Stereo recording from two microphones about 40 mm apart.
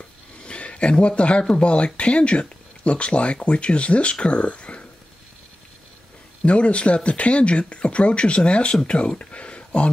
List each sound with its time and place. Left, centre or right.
0.5 s speech: left
6.4 s speech: left